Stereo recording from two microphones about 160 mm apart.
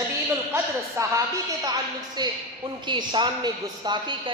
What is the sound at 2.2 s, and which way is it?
A woman's voice, 25° right (ahead or behind).